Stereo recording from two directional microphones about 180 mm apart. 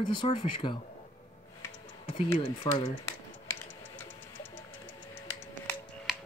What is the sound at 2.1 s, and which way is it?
Speech, 25° left (ahead or behind).